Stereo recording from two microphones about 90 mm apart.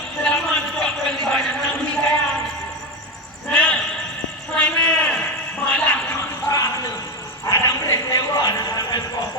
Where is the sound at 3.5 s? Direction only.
15° left (ahead or behind).